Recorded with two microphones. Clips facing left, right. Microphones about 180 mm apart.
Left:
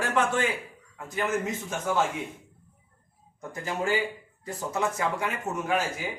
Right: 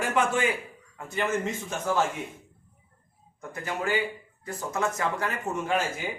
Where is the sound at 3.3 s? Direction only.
25° left (ahead or behind).